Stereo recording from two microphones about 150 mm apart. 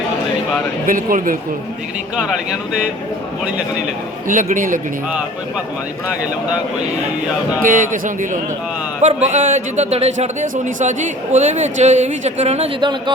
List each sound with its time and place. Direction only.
0.9 s a man's voice: 65° right (ahead or behind)
2.2 s speech: 5° right (ahead or behind)
4.3 s a man's voice: 60° right (ahead or behind)
7.6 s a man's voice: 65° right (ahead or behind)
9.0 s speech: 50° right (ahead or behind)
12.8 s speech: 30° right (ahead or behind)